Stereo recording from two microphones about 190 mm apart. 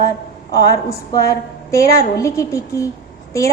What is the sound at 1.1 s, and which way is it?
A woman's voice, 15° left (ahead or behind).